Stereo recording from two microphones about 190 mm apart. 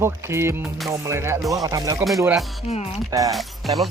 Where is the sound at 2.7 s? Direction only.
35° left (ahead or behind).